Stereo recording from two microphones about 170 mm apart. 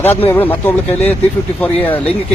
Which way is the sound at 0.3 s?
10° left (ahead or behind).